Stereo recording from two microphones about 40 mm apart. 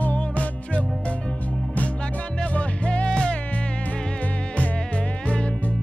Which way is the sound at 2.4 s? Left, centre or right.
Left.